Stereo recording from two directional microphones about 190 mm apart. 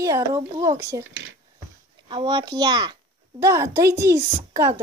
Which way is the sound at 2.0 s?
25° right (ahead or behind).